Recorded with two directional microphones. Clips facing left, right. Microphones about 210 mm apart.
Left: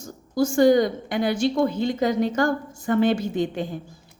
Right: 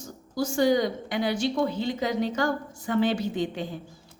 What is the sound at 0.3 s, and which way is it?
A woman's voice, 50° left (ahead or behind).